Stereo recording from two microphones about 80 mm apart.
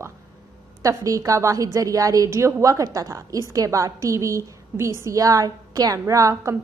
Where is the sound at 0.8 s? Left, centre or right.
Right.